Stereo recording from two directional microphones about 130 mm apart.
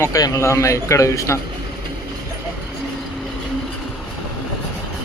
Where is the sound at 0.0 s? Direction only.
25° left (ahead or behind).